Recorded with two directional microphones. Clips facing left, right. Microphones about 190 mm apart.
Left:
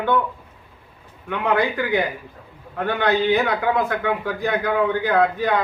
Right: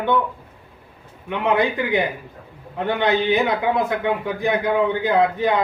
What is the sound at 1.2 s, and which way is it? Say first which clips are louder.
A man's voice: right 1 dB; 20° right (ahead or behind).